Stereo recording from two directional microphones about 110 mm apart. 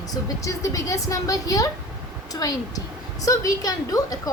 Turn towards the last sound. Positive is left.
turn(degrees=35)  # may be behind; listen again after turning